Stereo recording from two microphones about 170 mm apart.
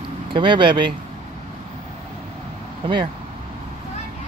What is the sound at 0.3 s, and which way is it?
Speech, 30° right (ahead or behind).